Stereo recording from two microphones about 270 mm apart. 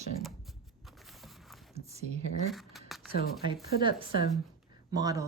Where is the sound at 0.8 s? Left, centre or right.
Centre.